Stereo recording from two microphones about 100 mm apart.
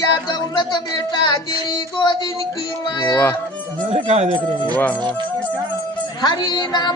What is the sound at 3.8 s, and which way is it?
Speech, 90° right.